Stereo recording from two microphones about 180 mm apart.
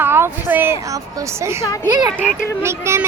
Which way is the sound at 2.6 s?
15° right (ahead or behind).